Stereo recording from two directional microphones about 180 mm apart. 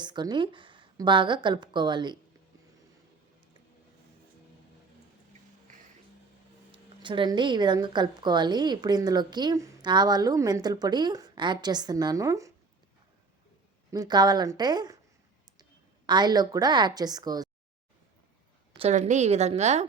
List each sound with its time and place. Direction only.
0.0 s a woman's voice: 25° right (ahead or behind)
6.7 s speech: 25° right (ahead or behind)
13.9 s speech: 20° right (ahead or behind)
16.0 s speech: 25° right (ahead or behind)
18.8 s a woman's voice: 40° right (ahead or behind)